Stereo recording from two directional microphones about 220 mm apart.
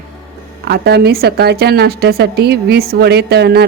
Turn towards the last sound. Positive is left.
turn(degrees=-45)  # may be behind; listen again after turning